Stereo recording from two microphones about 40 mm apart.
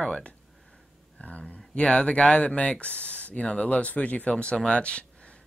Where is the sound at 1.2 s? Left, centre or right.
Left.